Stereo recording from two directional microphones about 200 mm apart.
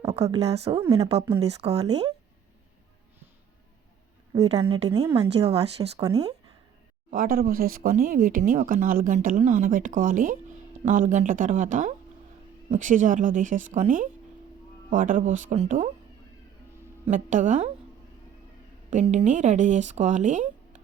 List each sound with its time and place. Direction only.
0.3 s a woman's voice: 25° right (ahead or behind)
4.4 s a woman's voice: 25° right (ahead or behind)
5.5 s speech: 30° right (ahead or behind)
6.0 s speech: 15° right (ahead or behind)
7.1 s speech: 45° right (ahead or behind)
17.1 s speech: 40° right (ahead or behind)
18.9 s speech: 35° right (ahead or behind)